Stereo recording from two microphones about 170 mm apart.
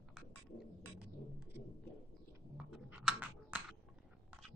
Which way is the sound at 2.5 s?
5° right (ahead or behind).